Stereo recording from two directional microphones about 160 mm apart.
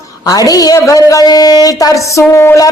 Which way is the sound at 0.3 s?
20° left (ahead or behind).